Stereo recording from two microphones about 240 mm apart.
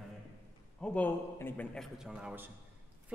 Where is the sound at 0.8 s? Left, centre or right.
Centre.